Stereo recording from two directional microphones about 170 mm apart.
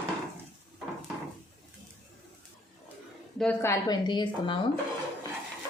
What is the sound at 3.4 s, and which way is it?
A woman's voice, 10° left (ahead or behind).